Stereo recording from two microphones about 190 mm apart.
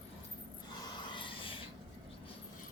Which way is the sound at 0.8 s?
25° left (ahead or behind).